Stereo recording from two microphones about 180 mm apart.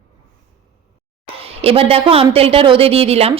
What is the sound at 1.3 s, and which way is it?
A woman's voice, 35° right (ahead or behind).